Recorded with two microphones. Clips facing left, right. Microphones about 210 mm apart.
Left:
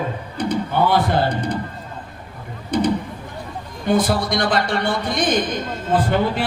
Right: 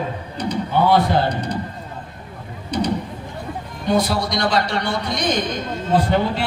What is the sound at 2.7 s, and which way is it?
A man's voice, 50° left (ahead or behind).